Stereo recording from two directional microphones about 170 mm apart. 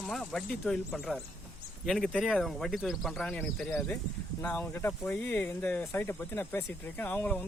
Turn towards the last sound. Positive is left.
turn(degrees=10)  # may be behind; listen again after turning